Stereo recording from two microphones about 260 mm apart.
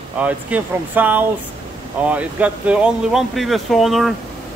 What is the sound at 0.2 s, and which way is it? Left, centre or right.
Speech, centre.